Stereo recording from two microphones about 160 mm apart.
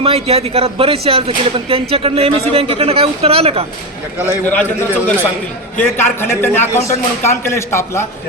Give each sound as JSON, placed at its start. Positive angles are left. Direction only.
{"t": 0.0, "sound": "speech", "side_deg": -40}
{"t": 4.3, "sound": "a man's voice", "side_deg": 10}